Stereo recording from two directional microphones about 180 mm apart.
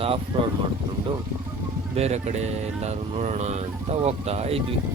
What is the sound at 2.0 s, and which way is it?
Speech, 40° right (ahead or behind).